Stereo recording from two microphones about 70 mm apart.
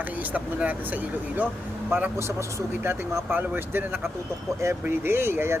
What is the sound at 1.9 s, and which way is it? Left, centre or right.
Speech, right.